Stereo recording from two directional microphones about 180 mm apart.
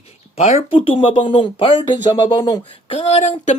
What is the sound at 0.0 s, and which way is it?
Speech, 35° left (ahead or behind).